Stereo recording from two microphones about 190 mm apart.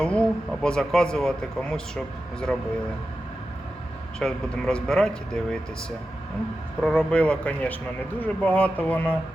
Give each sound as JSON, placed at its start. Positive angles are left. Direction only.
{"t": 0.0, "sound": "speech", "side_deg": 5}
{"t": 4.2, "sound": "speech", "side_deg": 5}
{"t": 6.8, "sound": "speech", "side_deg": 5}